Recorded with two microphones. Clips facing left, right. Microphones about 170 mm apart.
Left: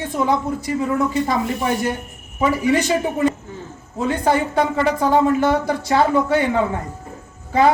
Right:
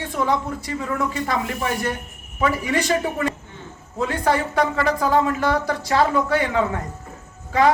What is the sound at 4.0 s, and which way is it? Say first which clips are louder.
Speech: left 3 dB; 20° left (ahead or behind).